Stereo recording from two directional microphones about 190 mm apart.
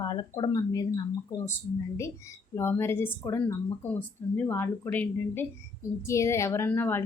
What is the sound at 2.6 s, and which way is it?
A woman's voice, 15° left (ahead or behind).